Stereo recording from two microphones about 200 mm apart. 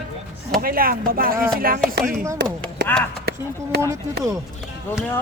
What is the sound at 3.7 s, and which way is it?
Speech, 55° right (ahead or behind).